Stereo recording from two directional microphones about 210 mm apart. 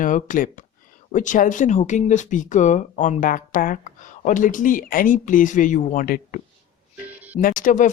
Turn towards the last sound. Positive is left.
turn(degrees=35)  # may be behind; listen again after turning